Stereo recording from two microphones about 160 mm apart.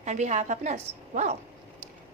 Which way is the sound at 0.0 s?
45° right (ahead or behind).